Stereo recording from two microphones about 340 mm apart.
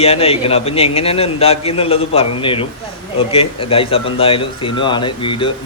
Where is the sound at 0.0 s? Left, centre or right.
Centre.